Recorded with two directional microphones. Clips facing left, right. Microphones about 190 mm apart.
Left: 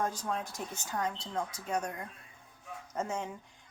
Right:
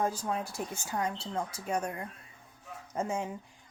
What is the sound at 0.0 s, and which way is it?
Speech, 10° right (ahead or behind).